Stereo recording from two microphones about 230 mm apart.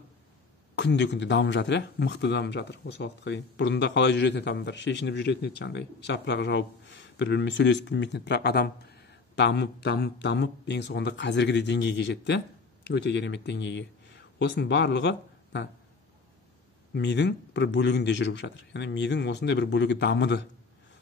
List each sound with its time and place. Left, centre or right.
0.7 s speech: left
16.9 s speech: left